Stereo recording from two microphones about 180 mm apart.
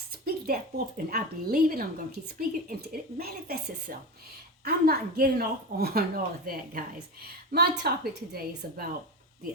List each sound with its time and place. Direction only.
0.3 s a woman's voice: 55° right (ahead or behind)